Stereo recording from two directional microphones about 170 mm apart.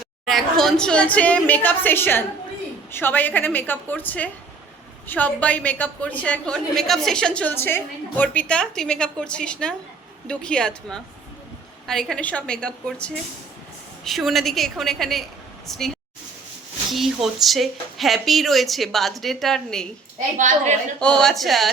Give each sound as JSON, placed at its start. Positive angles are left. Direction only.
{"t": 0.3, "sound": "a woman's voice", "side_deg": 0}
{"t": 16.9, "sound": "a woman's voice", "side_deg": 0}
{"t": 20.4, "sound": "a woman's voice", "side_deg": -50}
{"t": 21.0, "sound": "a woman's voice", "side_deg": 5}